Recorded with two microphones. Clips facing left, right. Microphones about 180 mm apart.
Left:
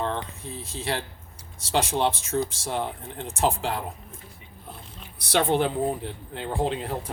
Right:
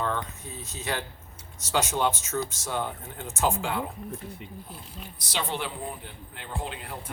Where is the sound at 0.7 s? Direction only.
30° left (ahead or behind).